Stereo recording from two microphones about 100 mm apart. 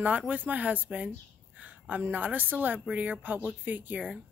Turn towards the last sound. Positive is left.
turn(degrees=-15)  # may be behind; listen again after turning